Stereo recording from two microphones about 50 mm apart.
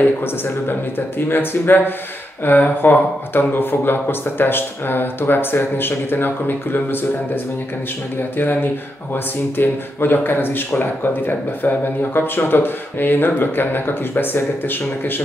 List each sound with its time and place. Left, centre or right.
0.0 s speech: left
8.2 s speech: left